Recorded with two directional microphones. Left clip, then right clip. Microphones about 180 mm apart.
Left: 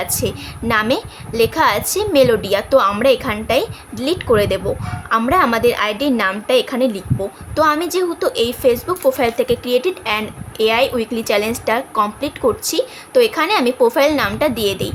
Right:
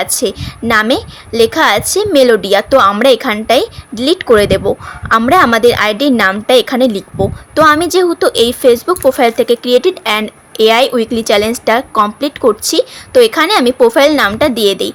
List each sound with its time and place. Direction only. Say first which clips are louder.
0.0 s a woman's voice: right 6 dB; 30° right (ahead or behind)